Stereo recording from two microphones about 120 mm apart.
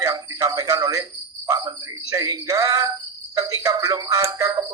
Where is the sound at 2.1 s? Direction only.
30° right (ahead or behind).